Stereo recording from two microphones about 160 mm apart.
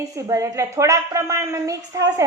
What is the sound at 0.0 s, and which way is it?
A woman's voice, 20° right (ahead or behind).